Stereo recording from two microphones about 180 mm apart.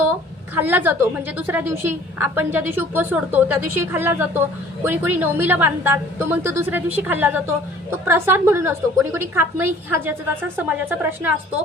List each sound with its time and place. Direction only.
0.5 s a woman's voice: 10° right (ahead or behind)